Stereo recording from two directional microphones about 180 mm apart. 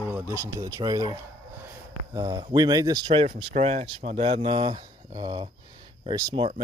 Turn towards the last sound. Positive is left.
turn(degrees=-25)  # may be behind; listen again after turning